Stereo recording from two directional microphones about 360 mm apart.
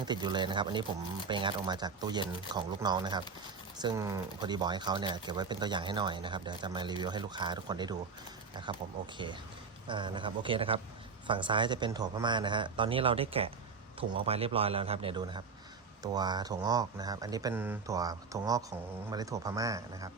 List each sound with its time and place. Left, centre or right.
0.0 s speech: centre